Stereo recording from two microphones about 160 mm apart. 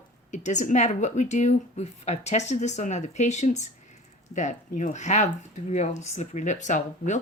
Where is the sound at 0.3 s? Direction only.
50° left (ahead or behind).